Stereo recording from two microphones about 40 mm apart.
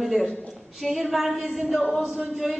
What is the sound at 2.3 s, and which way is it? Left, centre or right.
Speech, centre.